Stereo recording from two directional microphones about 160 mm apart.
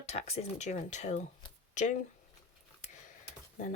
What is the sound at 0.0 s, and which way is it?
Speech, 40° left (ahead or behind).